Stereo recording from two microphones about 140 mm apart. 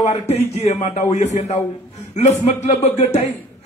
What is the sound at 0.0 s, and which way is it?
A man's voice, 50° left (ahead or behind).